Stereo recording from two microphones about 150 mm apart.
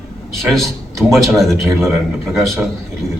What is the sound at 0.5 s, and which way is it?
Speech, centre (ahead or behind).